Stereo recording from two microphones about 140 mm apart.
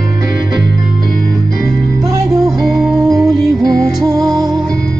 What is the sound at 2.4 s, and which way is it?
Music, centre (ahead or behind).